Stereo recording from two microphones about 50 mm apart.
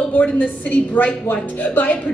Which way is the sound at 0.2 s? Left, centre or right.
Left.